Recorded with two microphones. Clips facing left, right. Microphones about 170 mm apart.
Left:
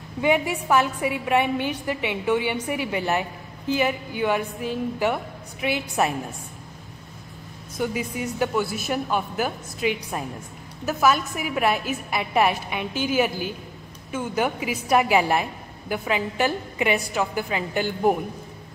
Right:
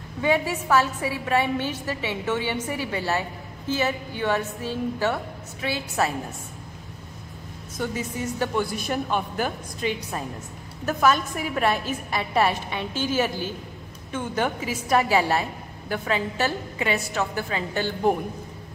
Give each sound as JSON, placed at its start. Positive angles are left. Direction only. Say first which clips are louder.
{"t": 0.2, "sound": "a woman's voice", "louder": "left 1 dB", "side_deg": 15}
{"t": 7.7, "sound": "a woman's voice", "louder": "left 2 dB", "side_deg": 10}